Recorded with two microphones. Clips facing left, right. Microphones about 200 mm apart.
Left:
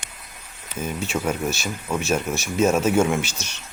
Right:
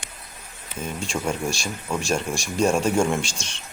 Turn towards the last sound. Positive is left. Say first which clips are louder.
# left 1 dB
turn(degrees=-30)  # may be behind; listen again after turning